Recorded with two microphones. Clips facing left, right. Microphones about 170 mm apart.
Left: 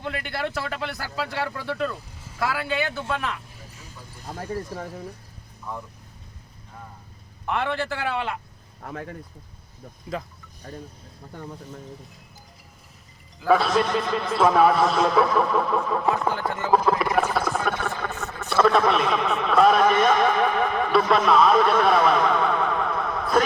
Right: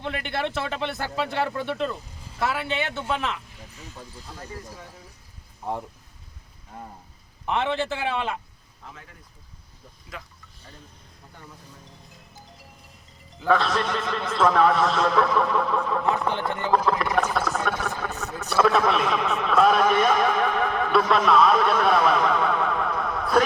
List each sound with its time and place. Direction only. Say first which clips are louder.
0.0 s a man's voice: right 1 dB; 20° right (ahead or behind)
4.3 s speech: left 10 dB; 55° left (ahead or behind)
7.4 s a man's voice: right 1 dB; 20° right (ahead or behind)
8.8 s speech: left 11 dB; 60° left (ahead or behind)
10.1 s vehicle: left 10 dB; 40° left (ahead or behind)
13.5 s a man's voice: left 3 dB; 5° left (ahead or behind)